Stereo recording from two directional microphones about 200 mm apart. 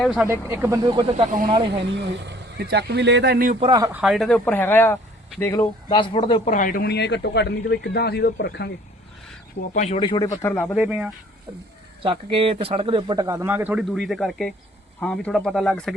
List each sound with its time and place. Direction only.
0.0 s speech: centre (ahead or behind)
0.3 s speech: 15° right (ahead or behind)
1.1 s speech: 40° right (ahead or behind)
1.8 s speech: 60° right (ahead or behind); by 3.6 s 45° right (ahead or behind)
3.6 s speech: 20° right (ahead or behind)
4.0 s speech: centre (ahead or behind); by 6.5 s 25° left (ahead or behind)
6.5 s speech: 40° left (ahead or behind); by 8.7 s 60° left (ahead or behind)
9.6 s speech: 40° left (ahead or behind); by 10.5 s 20° left (ahead or behind)
10.5 s speech: 5° left (ahead or behind)
10.8 s speech: 5° right (ahead or behind)
12.0 s speech: 25° right (ahead or behind); by 16.0 s centre (ahead or behind)